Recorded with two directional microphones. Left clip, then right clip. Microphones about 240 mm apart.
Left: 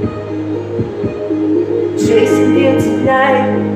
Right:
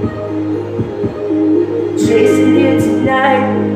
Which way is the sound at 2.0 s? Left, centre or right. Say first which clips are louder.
Right 1 dB; centre.